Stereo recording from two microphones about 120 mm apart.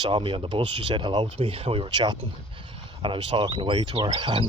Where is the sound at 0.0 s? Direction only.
45° right (ahead or behind).